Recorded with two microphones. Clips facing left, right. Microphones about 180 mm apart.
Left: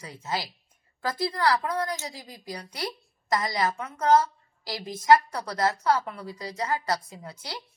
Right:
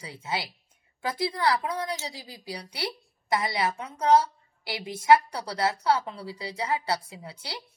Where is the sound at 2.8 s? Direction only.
25° right (ahead or behind).